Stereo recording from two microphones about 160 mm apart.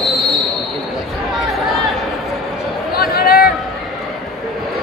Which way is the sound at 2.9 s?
70° left (ahead or behind).